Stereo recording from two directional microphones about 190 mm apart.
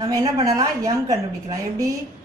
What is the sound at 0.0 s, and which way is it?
A woman's voice, 20° right (ahead or behind).